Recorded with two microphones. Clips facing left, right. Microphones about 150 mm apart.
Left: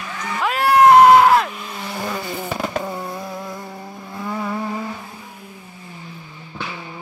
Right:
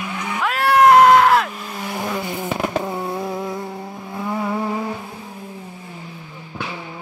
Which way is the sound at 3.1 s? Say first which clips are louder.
Right 5 dB; 20° right (ahead or behind).